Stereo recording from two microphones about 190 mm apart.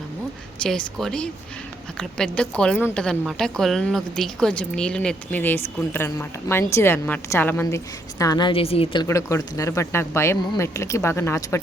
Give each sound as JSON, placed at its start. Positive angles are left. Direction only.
{"t": 0.6, "sound": "a woman's voice", "side_deg": 5}
{"t": 9.0, "sound": "speech", "side_deg": 15}